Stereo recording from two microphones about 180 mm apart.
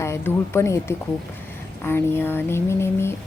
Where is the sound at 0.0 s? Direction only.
15° left (ahead or behind).